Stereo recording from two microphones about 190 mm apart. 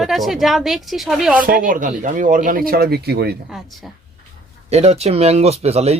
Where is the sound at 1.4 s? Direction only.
45° right (ahead or behind).